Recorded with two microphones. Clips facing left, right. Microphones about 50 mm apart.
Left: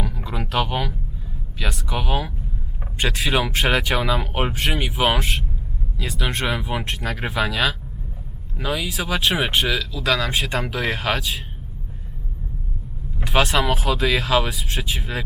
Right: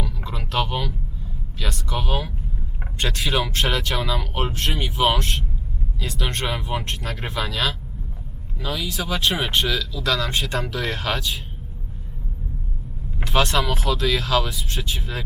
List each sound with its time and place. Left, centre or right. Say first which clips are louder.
0.2 s a sound: left 1 dB; centre
1.5 s speech: left 1 dB; centre
13.2 s speech: left 2 dB; centre
14.5 s speech: left 2 dB; centre